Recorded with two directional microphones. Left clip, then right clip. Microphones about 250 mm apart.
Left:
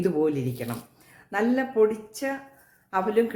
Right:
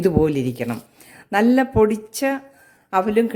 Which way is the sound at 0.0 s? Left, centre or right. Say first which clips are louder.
Right 6 dB; right.